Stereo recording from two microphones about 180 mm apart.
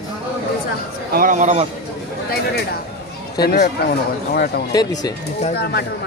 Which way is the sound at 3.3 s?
65° left (ahead or behind).